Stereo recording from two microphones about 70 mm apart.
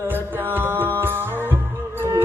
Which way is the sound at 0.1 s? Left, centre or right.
Right.